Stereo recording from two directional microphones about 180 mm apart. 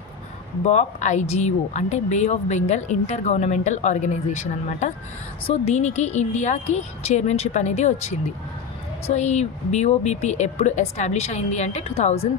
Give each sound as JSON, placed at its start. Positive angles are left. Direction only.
{"t": 0.7, "sound": "speech", "side_deg": 40}